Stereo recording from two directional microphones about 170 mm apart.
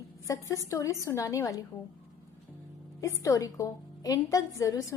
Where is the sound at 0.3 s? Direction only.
20° left (ahead or behind).